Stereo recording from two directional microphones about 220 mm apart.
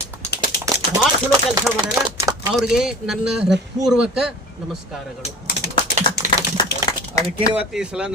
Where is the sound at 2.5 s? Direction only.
Centre (ahead or behind).